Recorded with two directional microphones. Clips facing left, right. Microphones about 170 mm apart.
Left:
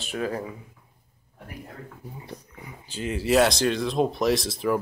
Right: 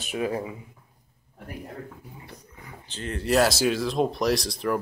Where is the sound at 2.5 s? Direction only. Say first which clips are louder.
Left 1 dB; 10° left (ahead or behind).